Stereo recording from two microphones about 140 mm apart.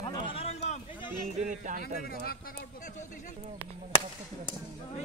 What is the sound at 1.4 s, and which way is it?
Speech, 65° right (ahead or behind).